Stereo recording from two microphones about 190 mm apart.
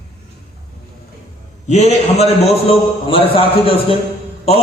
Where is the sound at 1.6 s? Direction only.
35° left (ahead or behind).